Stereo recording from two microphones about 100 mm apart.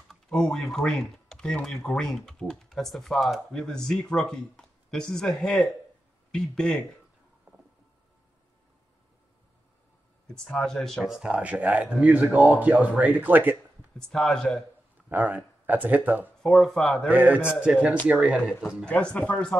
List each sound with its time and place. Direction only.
0.1 s speech: 5° left (ahead or behind)
10.2 s speech: 5° left (ahead or behind)
13.0 s a man's voice: 15° right (ahead or behind)
13.9 s speech: 5° left (ahead or behind)
15.0 s speech: 15° right (ahead or behind)
16.4 s speech: centre (ahead or behind)
17.1 s a man's voice: 15° right (ahead or behind)
18.9 s speech: 10° left (ahead or behind)